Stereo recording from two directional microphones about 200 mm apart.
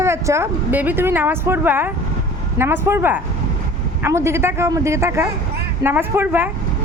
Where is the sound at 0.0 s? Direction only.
15° right (ahead or behind).